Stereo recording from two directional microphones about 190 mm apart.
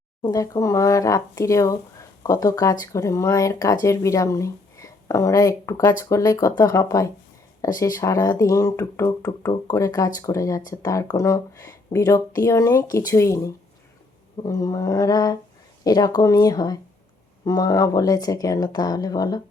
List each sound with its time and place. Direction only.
0.2 s speech: 20° left (ahead or behind)